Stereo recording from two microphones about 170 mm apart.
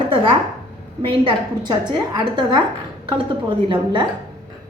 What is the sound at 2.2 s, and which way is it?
Speech, 25° right (ahead or behind).